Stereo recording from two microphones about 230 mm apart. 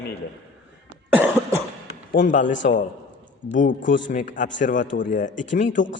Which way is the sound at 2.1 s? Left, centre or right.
Left.